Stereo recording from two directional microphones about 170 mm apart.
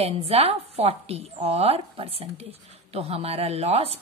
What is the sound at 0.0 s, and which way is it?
A woman's voice, 35° right (ahead or behind).